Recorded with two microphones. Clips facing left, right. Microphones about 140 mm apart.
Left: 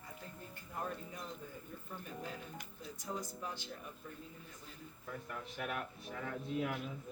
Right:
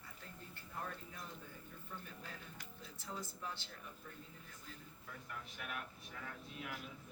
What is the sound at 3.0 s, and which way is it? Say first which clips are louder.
Speech: left 4 dB; 15° left (ahead or behind).